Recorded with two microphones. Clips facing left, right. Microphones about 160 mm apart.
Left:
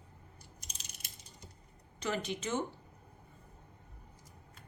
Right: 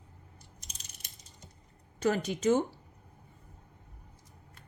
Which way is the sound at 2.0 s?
45° right (ahead or behind).